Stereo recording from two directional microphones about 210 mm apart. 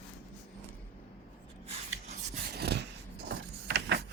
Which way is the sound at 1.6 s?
30° right (ahead or behind).